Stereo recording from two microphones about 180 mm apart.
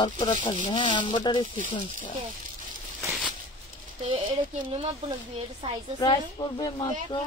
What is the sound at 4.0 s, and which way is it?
Speech, 30° right (ahead or behind).